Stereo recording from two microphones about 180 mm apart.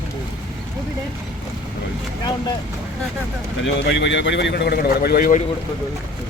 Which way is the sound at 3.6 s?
80° left.